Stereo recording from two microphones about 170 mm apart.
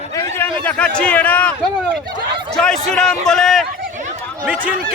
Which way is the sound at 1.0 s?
10° left (ahead or behind).